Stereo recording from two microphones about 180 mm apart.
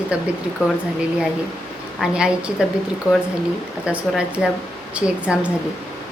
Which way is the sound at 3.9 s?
5° right (ahead or behind).